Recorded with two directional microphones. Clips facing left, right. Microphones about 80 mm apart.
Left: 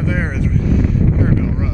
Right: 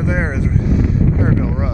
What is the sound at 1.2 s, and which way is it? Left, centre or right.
Speech, right.